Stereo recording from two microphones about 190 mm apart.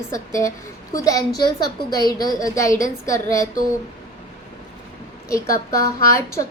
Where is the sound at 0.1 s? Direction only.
15° left (ahead or behind).